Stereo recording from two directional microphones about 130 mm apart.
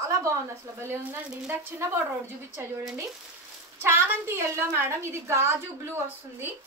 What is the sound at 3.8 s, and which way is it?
A woman's voice, 20° right (ahead or behind).